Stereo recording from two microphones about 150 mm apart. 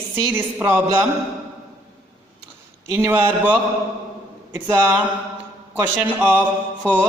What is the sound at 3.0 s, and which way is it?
A man's voice, 15° right (ahead or behind).